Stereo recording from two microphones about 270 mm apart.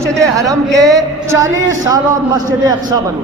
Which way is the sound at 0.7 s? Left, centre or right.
Centre.